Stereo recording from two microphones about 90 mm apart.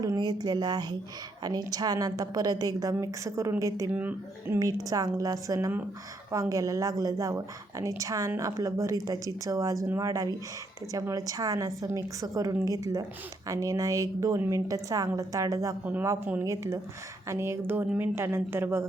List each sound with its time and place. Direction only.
0.2 s a woman's voice: 50° right (ahead or behind)
3.9 s a woman's voice: 20° right (ahead or behind)
4.6 s a woman's voice: 40° right (ahead or behind)
15.8 s a woman's voice: 20° right (ahead or behind)
16.4 s a woman's voice: 35° right (ahead or behind)